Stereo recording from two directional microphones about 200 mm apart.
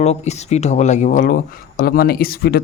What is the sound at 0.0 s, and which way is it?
Speech, 35° left (ahead or behind).